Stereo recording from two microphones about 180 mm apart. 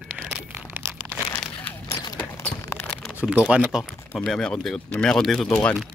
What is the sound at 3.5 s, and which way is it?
Speech, 5° right (ahead or behind).